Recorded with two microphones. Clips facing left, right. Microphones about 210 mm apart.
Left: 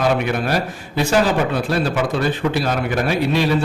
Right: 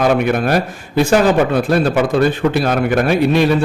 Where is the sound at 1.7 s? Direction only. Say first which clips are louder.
Right 5 dB; 50° right (ahead or behind).